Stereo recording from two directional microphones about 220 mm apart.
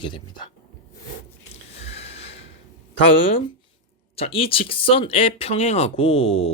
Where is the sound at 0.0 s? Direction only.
20° left (ahead or behind).